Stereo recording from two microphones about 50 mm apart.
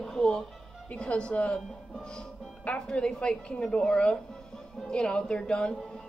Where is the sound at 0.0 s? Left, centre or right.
Centre.